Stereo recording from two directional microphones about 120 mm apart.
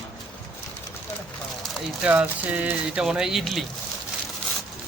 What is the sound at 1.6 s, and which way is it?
Speech, 10° right (ahead or behind).